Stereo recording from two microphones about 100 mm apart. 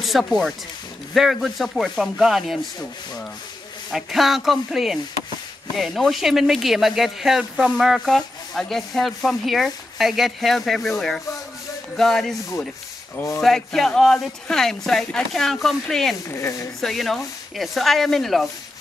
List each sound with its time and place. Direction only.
0.0 s speech: centre (ahead or behind)
3.9 s speech: centre (ahead or behind)
13.1 s speech: 25° left (ahead or behind)
13.4 s speech: 5° left (ahead or behind)
16.3 s speech: 30° left (ahead or behind)
16.8 s speech: centre (ahead or behind)